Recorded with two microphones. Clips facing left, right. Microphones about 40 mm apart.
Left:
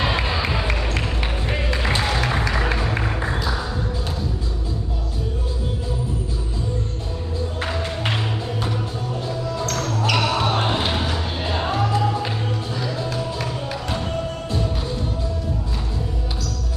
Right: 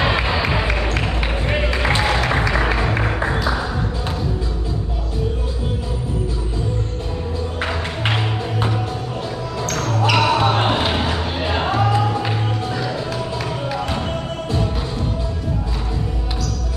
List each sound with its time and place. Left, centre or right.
0.0 s a sound: centre
1.8 s music: right
10.0 s basketball bounce: right
10.9 s music: right